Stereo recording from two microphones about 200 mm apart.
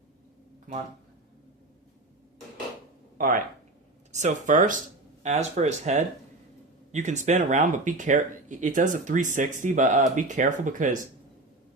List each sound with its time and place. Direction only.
3.2 s speech: 40° right (ahead or behind)